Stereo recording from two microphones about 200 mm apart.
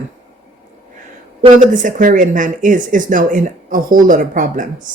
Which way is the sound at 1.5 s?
40° right (ahead or behind).